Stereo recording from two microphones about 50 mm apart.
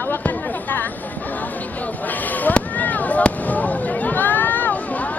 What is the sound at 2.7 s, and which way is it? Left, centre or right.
Fireworks, left.